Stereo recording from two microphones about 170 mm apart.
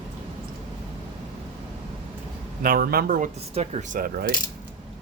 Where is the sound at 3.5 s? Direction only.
40° right (ahead or behind).